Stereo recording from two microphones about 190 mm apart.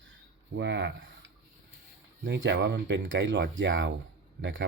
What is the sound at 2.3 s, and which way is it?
Speech, 65° right (ahead or behind).